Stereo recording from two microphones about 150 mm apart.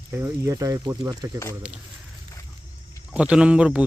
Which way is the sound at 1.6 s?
5° right (ahead or behind).